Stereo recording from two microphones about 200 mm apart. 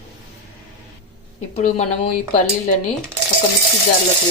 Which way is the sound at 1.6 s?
35° left (ahead or behind).